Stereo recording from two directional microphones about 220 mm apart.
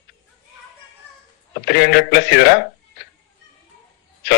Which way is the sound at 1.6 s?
45° left (ahead or behind).